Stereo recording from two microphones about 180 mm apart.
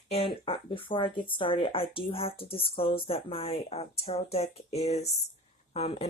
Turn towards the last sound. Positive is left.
turn(degrees=35)  # may be behind; listen again after turning